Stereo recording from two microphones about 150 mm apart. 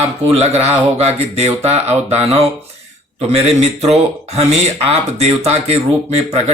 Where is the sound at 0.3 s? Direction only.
45° right (ahead or behind).